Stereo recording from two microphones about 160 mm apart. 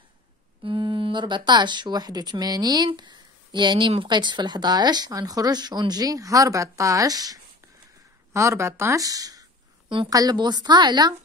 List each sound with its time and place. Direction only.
0.7 s speech: 30° right (ahead or behind)